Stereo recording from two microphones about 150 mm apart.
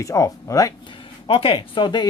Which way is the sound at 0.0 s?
20° left (ahead or behind).